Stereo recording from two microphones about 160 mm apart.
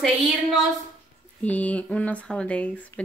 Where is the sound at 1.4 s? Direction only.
10° left (ahead or behind).